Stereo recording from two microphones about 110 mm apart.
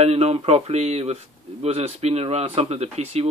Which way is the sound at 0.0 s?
80° right.